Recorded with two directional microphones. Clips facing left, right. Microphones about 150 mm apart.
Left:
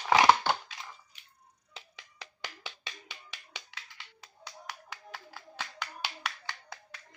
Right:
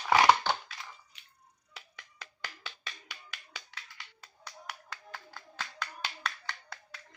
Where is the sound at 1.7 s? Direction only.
20° left (ahead or behind).